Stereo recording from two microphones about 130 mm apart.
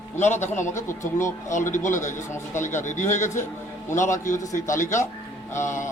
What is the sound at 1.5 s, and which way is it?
Speech, 75° left (ahead or behind).